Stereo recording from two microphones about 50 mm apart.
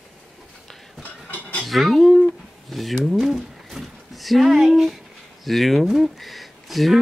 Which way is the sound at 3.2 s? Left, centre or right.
Centre.